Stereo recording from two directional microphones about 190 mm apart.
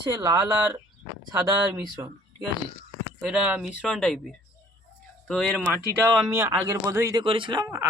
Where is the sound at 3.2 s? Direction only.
5° right (ahead or behind).